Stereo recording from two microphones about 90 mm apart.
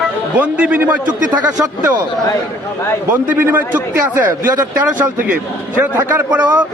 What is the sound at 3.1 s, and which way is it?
A man's voice, 20° right (ahead or behind).